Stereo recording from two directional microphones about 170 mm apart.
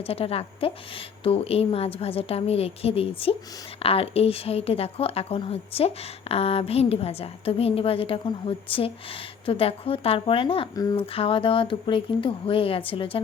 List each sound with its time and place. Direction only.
0.0 s speech: 35° left (ahead or behind)